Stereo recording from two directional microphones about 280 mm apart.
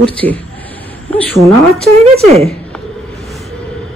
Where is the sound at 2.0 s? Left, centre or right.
Right.